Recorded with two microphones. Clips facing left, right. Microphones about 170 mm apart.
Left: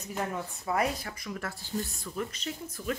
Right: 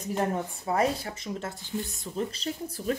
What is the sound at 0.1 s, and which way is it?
Speech, 30° right (ahead or behind).